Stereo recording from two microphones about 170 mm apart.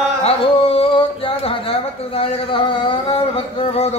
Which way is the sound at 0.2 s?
35° left (ahead or behind).